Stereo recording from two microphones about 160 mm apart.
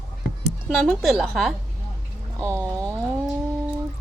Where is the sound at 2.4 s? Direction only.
20° right (ahead or behind).